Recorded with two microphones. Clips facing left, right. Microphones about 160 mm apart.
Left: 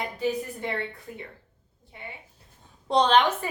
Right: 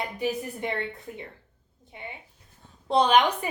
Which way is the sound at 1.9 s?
20° right (ahead or behind).